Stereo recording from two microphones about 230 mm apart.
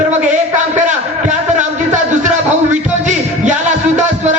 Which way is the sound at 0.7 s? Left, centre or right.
Right.